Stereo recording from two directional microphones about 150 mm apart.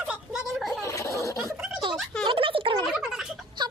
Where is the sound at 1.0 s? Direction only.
20° left (ahead or behind).